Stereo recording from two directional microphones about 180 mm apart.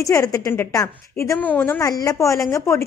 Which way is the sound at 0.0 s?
15° left (ahead or behind).